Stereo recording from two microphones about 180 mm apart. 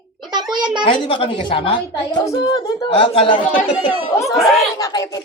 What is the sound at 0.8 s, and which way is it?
Speech, 30° left (ahead or behind).